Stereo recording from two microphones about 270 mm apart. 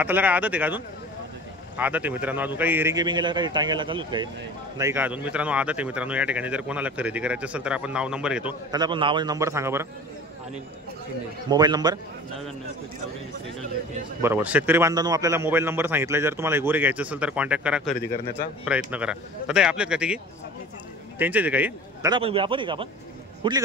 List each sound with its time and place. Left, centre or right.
0.0 s a man's voice: centre
8.7 s a man's voice: centre
11.4 s a man's voice: centre
14.2 s a man's voice: centre
21.2 s a man's voice: centre
22.1 s a man's voice: centre